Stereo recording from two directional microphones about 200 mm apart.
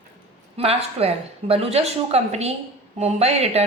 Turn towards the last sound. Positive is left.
turn(degrees=-30)  # may be behind; listen again after turning